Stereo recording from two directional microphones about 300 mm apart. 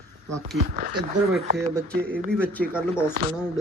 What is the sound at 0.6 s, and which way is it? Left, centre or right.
Speech, right.